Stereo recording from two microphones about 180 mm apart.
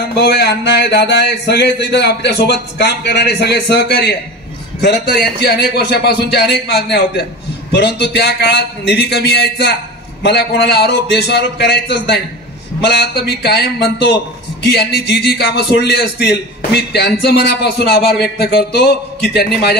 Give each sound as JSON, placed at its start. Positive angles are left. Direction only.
{"t": 0.1, "sound": "a man's voice", "side_deg": 60}